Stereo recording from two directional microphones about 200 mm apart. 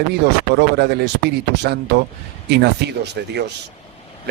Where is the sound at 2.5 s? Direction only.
55° right (ahead or behind).